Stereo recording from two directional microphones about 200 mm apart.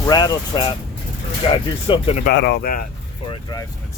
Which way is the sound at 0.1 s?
20° left (ahead or behind).